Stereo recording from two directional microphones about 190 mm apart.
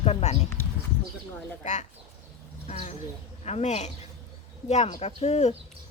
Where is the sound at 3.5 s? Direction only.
35° left (ahead or behind).